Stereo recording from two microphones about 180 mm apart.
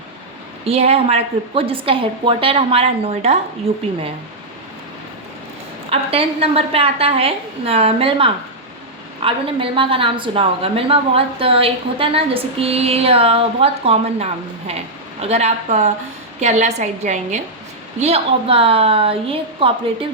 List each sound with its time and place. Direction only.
0.6 s a woman's voice: 35° right (ahead or behind)
5.9 s a woman's voice: 30° right (ahead or behind)